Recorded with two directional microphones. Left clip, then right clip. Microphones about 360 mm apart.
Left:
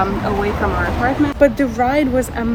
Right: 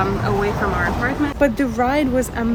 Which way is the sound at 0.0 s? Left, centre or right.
Centre.